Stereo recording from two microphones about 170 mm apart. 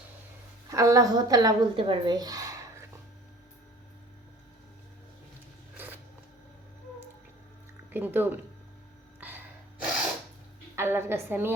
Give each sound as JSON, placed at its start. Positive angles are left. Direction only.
{"t": 0.7, "sound": "a woman's voice", "side_deg": -20}
{"t": 5.7, "sound": "a sound", "side_deg": -10}
{"t": 7.9, "sound": "a woman's voice", "side_deg": -10}
{"t": 9.2, "sound": "gasp", "side_deg": -10}
{"t": 10.8, "sound": "a woman's voice", "side_deg": -15}